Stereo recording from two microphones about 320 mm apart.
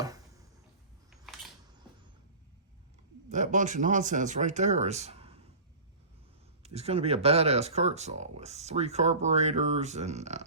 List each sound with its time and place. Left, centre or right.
1.1 s camera: centre
3.2 s speech: right
6.6 s speech: centre